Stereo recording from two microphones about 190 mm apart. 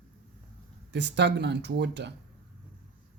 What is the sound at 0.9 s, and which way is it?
Speech, 65° right (ahead or behind).